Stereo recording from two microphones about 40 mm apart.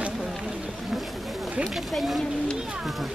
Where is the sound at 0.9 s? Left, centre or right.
Centre.